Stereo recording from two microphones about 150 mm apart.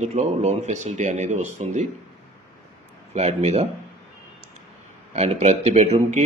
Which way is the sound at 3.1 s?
45° right (ahead or behind).